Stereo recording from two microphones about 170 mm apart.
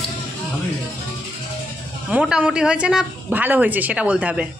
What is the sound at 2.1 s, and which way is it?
A woman's voice, 10° right (ahead or behind).